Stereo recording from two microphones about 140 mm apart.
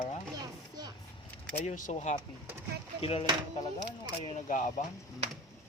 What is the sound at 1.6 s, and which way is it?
Speech, 60° left (ahead or behind).